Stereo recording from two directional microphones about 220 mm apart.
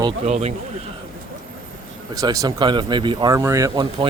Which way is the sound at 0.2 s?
30° right (ahead or behind).